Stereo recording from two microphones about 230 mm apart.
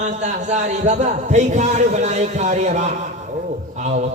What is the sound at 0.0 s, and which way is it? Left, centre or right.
A man's voice, right.